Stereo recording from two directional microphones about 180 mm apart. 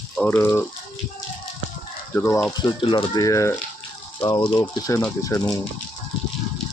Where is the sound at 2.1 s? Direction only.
10° left (ahead or behind).